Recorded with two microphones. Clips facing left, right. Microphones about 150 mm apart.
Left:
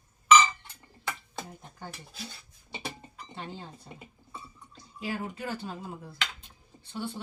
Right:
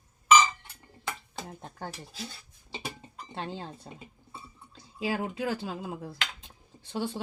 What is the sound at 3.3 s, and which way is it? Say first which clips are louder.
Speech: right 4 dB; 90° right.